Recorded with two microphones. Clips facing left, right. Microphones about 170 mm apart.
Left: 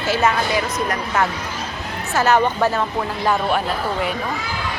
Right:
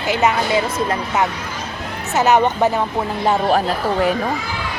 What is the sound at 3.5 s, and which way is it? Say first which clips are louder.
Speech: right 4 dB; 40° right (ahead or behind).